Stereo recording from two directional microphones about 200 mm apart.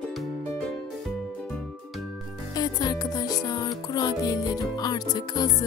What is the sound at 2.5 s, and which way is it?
Music, 20° left (ahead or behind).